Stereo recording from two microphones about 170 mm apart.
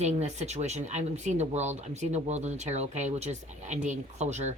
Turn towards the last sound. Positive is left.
turn(degrees=-40)  # may be behind; listen again after turning